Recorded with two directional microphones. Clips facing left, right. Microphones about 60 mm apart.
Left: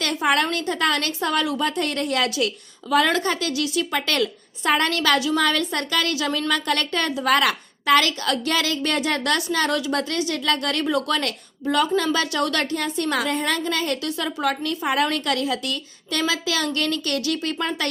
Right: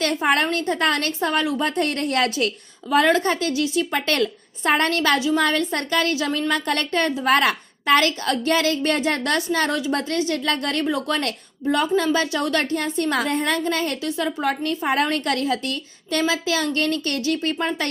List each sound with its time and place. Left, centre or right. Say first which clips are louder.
0.0 s a woman's voice: right 1 dB; right
1.7 s a woman's voice: right 2 dB; right